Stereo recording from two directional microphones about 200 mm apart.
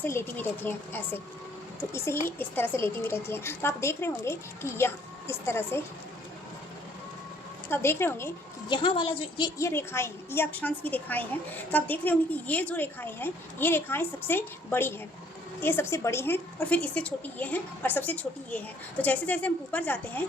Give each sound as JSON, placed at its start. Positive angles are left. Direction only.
{"t": 0.0, "sound": "a woman's voice", "side_deg": 10}
{"t": 7.7, "sound": "a woman's voice", "side_deg": 10}
{"t": 8.7, "sound": "a woman's voice", "side_deg": 25}
{"t": 9.6, "sound": "a woman's voice", "side_deg": 15}